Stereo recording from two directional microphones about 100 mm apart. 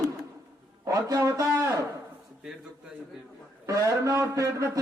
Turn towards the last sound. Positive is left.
turn(degrees=-30)  # may be behind; listen again after turning